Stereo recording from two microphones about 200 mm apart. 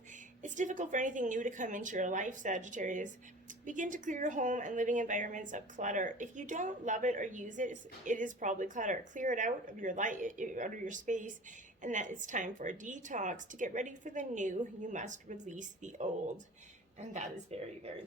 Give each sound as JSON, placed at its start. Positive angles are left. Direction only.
{"t": 0.4, "sound": "a woman's voice", "side_deg": -40}